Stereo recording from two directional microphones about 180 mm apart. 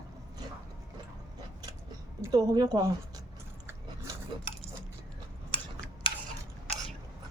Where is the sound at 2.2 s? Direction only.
20° right (ahead or behind).